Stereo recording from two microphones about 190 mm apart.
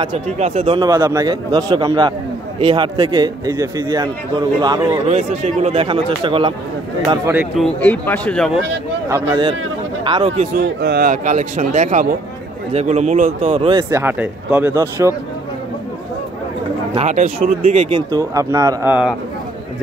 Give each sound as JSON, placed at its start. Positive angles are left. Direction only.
{"t": 0.0, "sound": "speech", "side_deg": -30}
{"t": 0.7, "sound": "a man's voice", "side_deg": -15}
{"t": 4.9, "sound": "a man's voice", "side_deg": -35}
{"t": 7.3, "sound": "a man's voice", "side_deg": 0}
{"t": 9.1, "sound": "a man's voice", "side_deg": -25}
{"t": 10.2, "sound": "speech", "side_deg": -35}
{"t": 10.6, "sound": "speech", "side_deg": -60}
{"t": 13.7, "sound": "speech", "side_deg": -15}
{"t": 16.9, "sound": "speech", "side_deg": -35}
{"t": 18.1, "sound": "speech", "side_deg": -15}